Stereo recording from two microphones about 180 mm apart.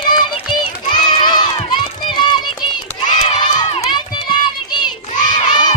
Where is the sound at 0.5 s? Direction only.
25° left (ahead or behind).